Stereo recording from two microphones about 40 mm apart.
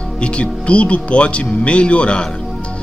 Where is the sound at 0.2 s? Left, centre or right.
Left.